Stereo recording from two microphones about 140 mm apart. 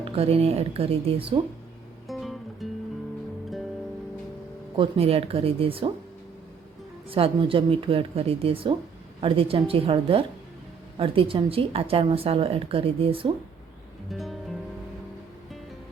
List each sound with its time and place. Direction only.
0.0 s speech: 45° right (ahead or behind)
2.0 s music: centre (ahead or behind)
4.8 s speech: 45° right (ahead or behind)
7.1 s a woman's voice: 40° right (ahead or behind)
14.1 s music: centre (ahead or behind)